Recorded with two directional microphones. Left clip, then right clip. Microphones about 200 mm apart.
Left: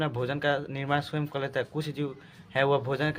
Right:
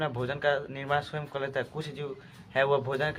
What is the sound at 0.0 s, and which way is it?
Speech, 40° left (ahead or behind).